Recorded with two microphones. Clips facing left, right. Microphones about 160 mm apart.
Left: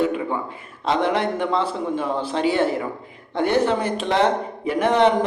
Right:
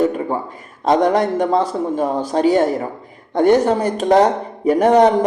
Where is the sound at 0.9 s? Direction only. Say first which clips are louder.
Right 6 dB; 40° right (ahead or behind).